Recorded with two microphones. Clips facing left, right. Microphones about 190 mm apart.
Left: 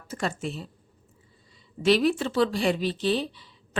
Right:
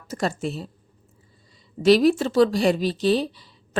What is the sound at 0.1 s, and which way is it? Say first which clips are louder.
Speech: right 4 dB; 40° right (ahead or behind).